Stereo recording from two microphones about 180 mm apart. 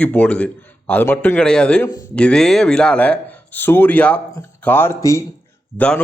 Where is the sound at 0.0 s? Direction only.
5° left (ahead or behind).